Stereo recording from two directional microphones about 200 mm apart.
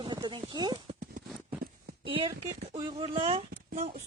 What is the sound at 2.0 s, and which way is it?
Speech, 25° right (ahead or behind).